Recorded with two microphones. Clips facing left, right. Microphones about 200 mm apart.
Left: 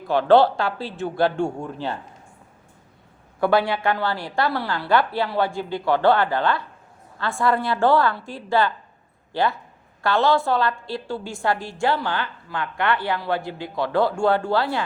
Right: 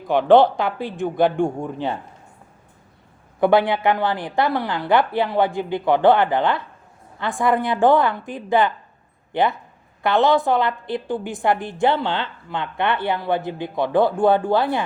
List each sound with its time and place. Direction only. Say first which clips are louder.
0.1 s speech: right 2 dB; 15° right (ahead or behind)
3.4 s a woman's voice: right 3 dB; 20° right (ahead or behind)